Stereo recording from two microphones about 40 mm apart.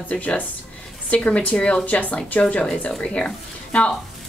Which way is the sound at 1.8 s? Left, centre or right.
Left.